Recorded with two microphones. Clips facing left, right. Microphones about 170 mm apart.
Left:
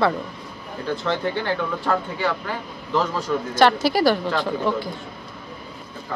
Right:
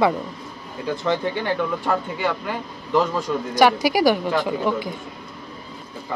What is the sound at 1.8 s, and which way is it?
Speech, 10° right (ahead or behind).